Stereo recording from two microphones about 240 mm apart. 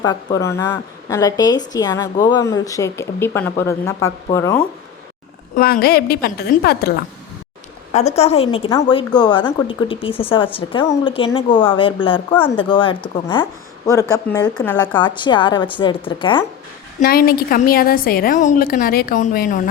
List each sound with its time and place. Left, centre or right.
0.0 s speech: centre
5.5 s a woman's voice: left
7.9 s a woman's voice: left; by 14.8 s centre
15.2 s a woman's voice: centre
17.0 s a woman's voice: left